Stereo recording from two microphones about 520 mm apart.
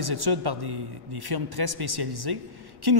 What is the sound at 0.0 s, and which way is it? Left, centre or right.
Speech, right.